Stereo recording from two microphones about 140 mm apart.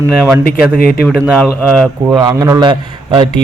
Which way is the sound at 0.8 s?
90° left.